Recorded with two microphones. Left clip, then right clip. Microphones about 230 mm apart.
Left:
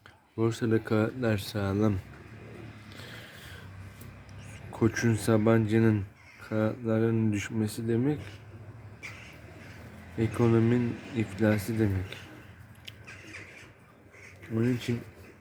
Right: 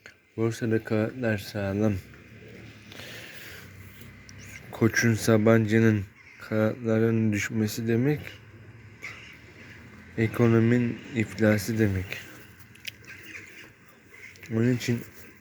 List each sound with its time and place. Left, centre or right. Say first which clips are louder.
0.3 s speech: right 1 dB; centre
4.5 s speech: right 4 dB; centre
10.2 s speech: right 3 dB; centre
14.5 s speech: right 3 dB; centre